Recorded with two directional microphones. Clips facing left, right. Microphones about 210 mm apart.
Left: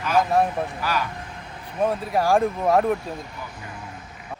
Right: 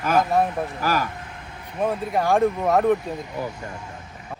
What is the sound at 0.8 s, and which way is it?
Speech, 50° right (ahead or behind).